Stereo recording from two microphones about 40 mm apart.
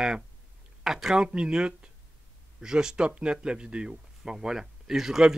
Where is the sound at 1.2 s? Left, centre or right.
Right.